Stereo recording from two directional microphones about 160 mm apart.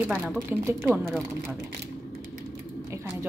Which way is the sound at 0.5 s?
15° right (ahead or behind).